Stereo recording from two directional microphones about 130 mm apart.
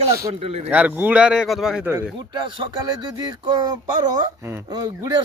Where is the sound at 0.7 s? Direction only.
10° right (ahead or behind).